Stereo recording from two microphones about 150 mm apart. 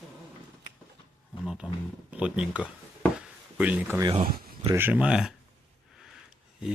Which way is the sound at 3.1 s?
10° right (ahead or behind).